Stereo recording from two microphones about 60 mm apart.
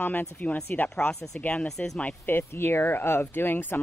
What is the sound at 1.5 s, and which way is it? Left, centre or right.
Speech, centre.